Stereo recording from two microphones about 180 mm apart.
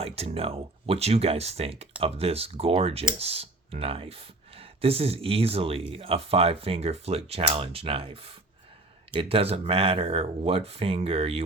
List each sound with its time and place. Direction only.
0.0 s speech: 35° right (ahead or behind)